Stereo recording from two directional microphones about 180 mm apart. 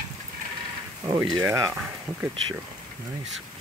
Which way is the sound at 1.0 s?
20° right (ahead or behind).